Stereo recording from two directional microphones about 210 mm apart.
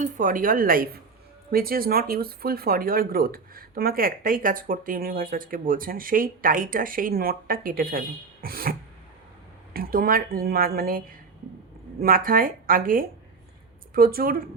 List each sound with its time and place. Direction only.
0.0 s speech: 40° right (ahead or behind)
9.7 s speech: 45° right (ahead or behind)